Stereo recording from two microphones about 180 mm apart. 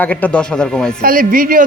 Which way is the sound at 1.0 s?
50° right (ahead or behind).